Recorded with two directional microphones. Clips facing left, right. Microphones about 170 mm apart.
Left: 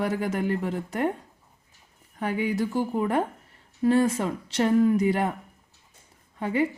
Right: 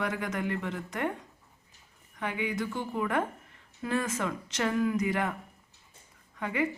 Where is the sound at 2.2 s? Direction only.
35° left (ahead or behind).